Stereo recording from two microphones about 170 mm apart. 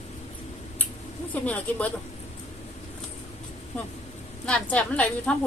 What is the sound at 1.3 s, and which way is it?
Speech, 10° left (ahead or behind).